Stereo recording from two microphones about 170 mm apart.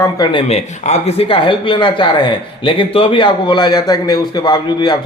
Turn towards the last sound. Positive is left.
turn(degrees=25)  # may be behind; listen again after turning